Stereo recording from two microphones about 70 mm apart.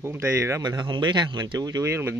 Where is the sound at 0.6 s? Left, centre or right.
Right.